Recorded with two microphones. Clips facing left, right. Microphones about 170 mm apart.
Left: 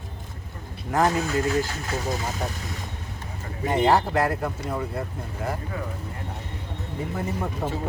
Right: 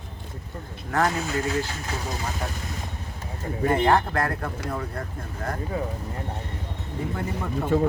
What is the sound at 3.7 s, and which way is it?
Speech, 10° left (ahead or behind).